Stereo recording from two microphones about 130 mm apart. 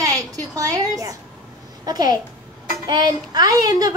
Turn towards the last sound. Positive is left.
turn(degrees=-30)  # may be behind; listen again after turning